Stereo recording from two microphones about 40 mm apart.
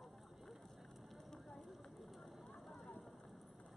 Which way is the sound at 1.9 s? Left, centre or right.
Centre.